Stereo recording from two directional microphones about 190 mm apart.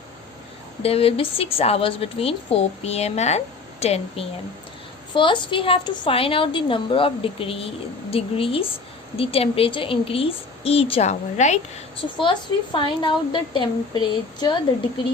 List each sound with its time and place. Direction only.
0.8 s a woman's voice: 30° left (ahead or behind)
12.1 s a woman's voice: 25° left (ahead or behind)